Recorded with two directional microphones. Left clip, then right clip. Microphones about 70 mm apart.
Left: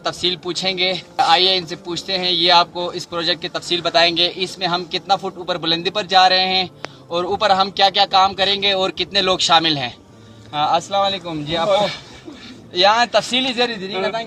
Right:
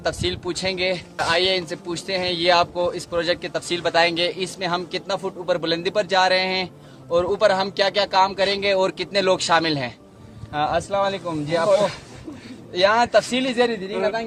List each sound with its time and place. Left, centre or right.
0.0 s a man's voice: right
12.7 s a man's voice: right